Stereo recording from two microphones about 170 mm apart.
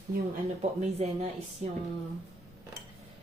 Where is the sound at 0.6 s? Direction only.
40° right (ahead or behind).